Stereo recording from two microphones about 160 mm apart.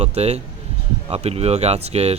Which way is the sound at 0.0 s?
40° right (ahead or behind).